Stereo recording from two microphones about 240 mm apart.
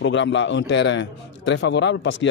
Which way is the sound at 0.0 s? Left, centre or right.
Left.